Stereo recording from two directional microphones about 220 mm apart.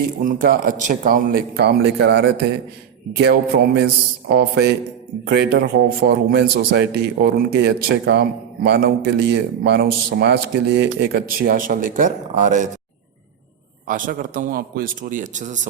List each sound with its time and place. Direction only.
0.0 s a man's voice: 40° right (ahead or behind)
13.8 s a man's voice: 40° right (ahead or behind)